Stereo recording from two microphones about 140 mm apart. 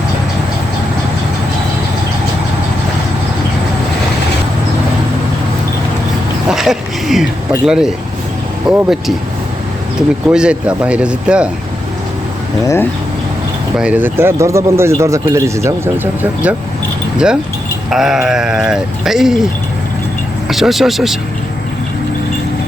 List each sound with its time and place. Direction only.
6.5 s speech: 5° right (ahead or behind)
10.2 s speech: 5° right (ahead or behind)
12.6 s speech: 20° left (ahead or behind)
13.7 s speech: 10° right (ahead or behind)
17.9 s speech: 5° right (ahead or behind)
20.5 s speech: centre (ahead or behind)